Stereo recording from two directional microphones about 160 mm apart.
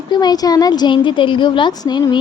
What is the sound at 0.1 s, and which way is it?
A woman's voice, 25° left (ahead or behind).